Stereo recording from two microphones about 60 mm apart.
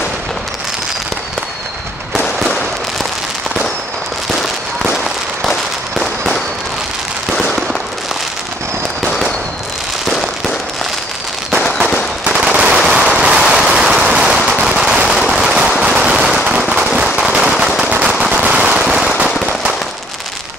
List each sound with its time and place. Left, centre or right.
4.9 s fireworks: centre
10.0 s fireworks: centre
12.3 s machine gun: centre
14.9 s a sound: centre
15.1 s machine gun: centre
16.4 s firecracker: centre